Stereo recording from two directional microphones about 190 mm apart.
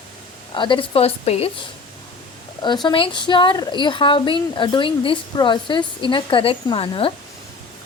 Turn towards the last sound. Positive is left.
turn(degrees=25)  # may be behind; listen again after turning